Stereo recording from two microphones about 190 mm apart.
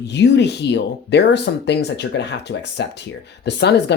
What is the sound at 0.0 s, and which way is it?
Speech, 65° left (ahead or behind).